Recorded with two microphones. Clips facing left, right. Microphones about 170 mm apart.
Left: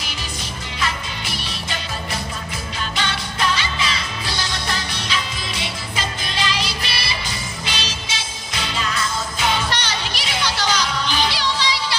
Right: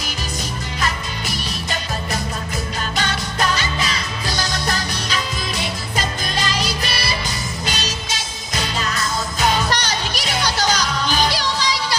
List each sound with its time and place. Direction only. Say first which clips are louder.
0.7 s music: even; 40° right (ahead or behind)
3.0 s music: right 2 dB; 40° right (ahead or behind)